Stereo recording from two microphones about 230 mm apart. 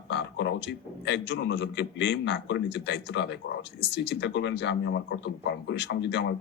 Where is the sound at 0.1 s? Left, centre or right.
Left.